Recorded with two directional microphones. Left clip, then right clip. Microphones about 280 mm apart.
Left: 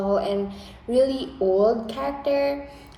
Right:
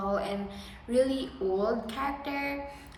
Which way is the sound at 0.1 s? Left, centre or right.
Centre.